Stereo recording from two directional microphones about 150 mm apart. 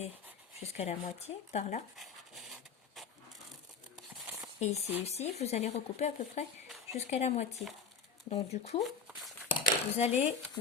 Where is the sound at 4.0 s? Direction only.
Centre (ahead or behind).